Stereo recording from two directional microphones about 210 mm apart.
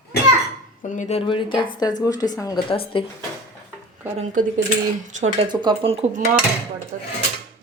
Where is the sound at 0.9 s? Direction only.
30° left (ahead or behind).